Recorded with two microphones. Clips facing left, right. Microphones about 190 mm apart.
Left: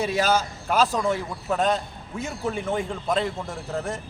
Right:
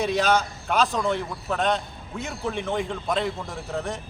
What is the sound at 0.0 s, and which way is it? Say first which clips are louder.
A man's voice: right 1 dB; 5° left (ahead or behind).